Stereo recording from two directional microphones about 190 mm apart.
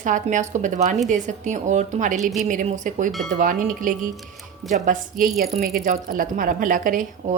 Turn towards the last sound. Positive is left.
turn(degrees=-45)  # may be behind; listen again after turning